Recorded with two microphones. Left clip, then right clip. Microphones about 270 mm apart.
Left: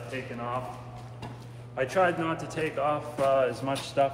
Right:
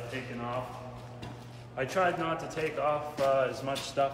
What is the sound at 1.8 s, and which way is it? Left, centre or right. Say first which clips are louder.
A man's voice: left 3 dB; left.